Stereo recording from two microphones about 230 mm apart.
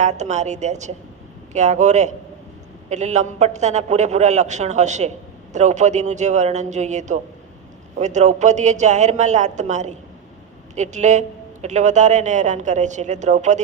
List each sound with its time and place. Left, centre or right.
0.0 s speech: right